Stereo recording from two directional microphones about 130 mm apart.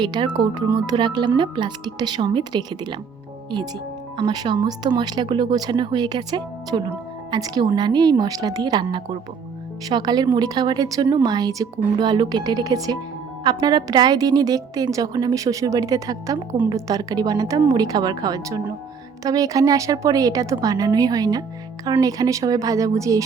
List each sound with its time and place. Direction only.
0.0 s speech: 35° right (ahead or behind)
4.2 s a woman's voice: 35° right (ahead or behind)